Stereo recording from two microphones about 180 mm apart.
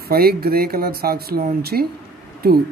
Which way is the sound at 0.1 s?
60° right (ahead or behind).